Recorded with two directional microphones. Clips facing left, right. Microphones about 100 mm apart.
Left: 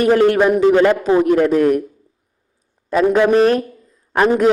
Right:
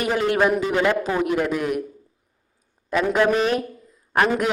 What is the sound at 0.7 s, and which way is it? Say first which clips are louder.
A man's voice: left 8 dB; 35° left (ahead or behind).